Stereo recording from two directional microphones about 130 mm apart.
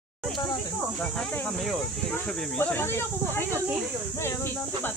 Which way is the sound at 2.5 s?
15° left (ahead or behind).